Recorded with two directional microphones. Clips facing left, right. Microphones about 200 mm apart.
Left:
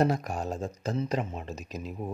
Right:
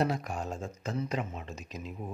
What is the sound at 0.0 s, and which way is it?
Speech, 45° left (ahead or behind).